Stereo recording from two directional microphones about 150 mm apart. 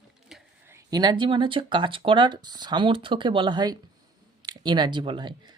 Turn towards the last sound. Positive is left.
turn(degrees=-30)  # may be behind; listen again after turning